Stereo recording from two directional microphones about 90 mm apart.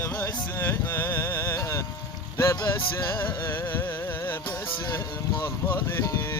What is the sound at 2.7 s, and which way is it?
Music, 30° left (ahead or behind).